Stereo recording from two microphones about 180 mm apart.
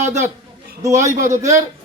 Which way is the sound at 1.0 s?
20° right (ahead or behind).